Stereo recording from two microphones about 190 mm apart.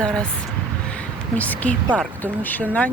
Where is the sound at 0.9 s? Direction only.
5° left (ahead or behind).